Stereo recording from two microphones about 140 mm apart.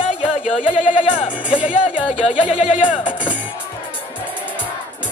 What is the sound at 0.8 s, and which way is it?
Speech, 60° left (ahead or behind).